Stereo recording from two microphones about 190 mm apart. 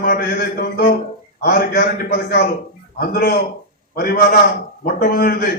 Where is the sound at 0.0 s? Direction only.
55° left (ahead or behind).